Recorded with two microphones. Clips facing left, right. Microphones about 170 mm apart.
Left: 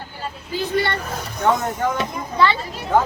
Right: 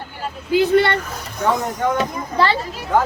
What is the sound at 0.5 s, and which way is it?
Speech, 65° right (ahead or behind).